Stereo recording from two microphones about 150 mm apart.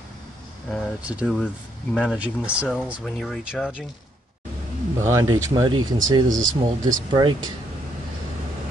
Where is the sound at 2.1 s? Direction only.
10° right (ahead or behind).